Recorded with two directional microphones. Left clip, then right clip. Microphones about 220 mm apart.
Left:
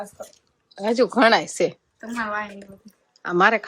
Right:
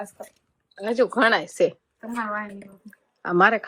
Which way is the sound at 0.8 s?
Centre (ahead or behind).